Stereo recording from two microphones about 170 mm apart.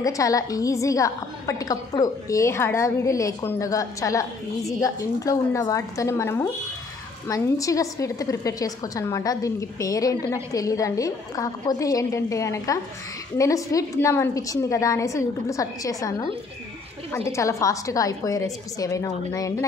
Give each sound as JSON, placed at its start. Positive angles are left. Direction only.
{"t": 0.0, "sound": "a woman's voice", "side_deg": 20}
{"t": 17.3, "sound": "a woman's voice", "side_deg": 15}